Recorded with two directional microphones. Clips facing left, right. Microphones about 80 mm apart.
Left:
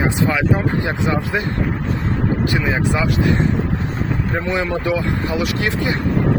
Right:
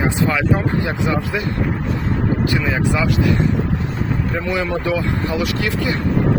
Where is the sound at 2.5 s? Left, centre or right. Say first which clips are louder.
Even; left.